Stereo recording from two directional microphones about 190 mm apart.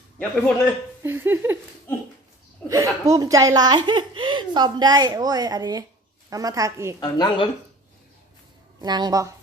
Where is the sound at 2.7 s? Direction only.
15° right (ahead or behind).